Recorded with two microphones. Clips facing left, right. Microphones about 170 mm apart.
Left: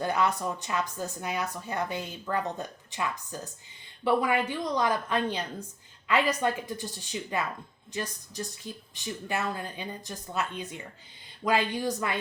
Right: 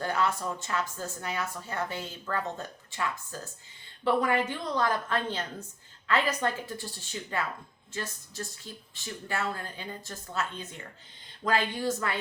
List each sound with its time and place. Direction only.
0.0 s speech: 15° left (ahead or behind)